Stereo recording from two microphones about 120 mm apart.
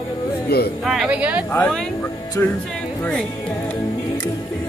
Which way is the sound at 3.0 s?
10° left (ahead or behind).